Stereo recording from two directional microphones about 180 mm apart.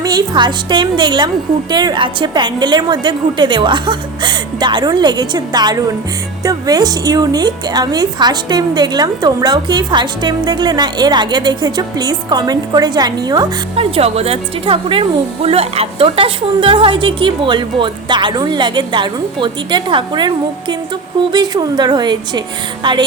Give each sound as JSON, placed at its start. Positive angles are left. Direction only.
{"t": 0.0, "sound": "a woman's voice", "side_deg": -20}